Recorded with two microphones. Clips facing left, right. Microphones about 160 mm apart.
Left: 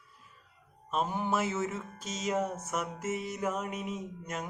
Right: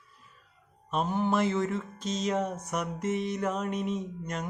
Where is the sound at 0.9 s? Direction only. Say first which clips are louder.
Right 3 dB; 10° left (ahead or behind).